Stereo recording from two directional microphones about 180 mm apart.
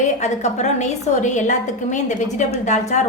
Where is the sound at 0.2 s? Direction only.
40° left (ahead or behind).